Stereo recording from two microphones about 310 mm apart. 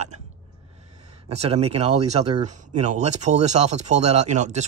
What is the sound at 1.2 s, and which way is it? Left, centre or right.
Speech, centre.